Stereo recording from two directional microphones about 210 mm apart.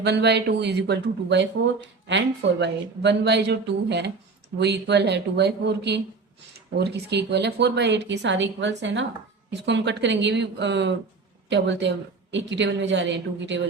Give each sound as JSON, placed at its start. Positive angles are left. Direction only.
{"t": 0.0, "sound": "a woman's voice", "side_deg": -55}